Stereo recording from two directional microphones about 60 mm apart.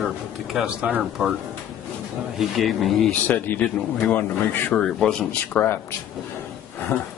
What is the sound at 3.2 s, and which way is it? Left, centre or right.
Speech, left.